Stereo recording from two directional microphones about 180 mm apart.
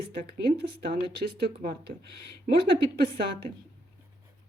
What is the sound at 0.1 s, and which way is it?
Speech, 65° right (ahead or behind).